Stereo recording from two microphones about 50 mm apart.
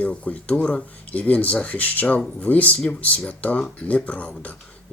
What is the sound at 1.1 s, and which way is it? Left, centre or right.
Speech, left.